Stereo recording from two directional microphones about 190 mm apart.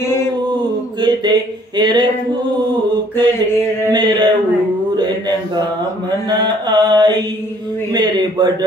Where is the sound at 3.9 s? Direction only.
25° right (ahead or behind).